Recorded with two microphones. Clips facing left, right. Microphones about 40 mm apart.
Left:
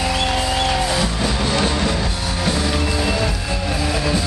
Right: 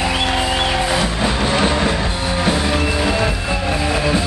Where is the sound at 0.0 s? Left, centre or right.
Right.